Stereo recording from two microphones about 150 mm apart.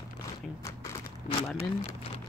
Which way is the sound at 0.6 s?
20° left (ahead or behind).